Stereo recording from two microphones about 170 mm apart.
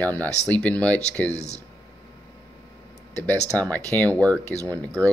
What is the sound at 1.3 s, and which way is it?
Speech, 40° left (ahead or behind).